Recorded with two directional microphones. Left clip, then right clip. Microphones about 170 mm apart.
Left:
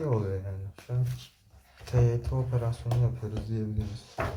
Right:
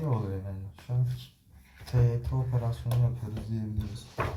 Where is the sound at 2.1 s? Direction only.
40° left (ahead or behind).